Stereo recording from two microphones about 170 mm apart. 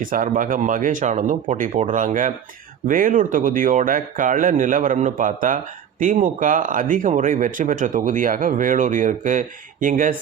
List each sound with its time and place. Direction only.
0.0 s speech: 55° right (ahead or behind)